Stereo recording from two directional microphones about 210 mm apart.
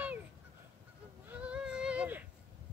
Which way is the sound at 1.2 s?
5° right (ahead or behind).